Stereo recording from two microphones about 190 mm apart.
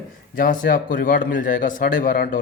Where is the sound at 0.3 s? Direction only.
45° left (ahead or behind).